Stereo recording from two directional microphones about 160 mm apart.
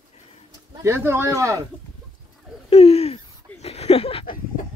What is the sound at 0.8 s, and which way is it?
Speech, 15° right (ahead or behind).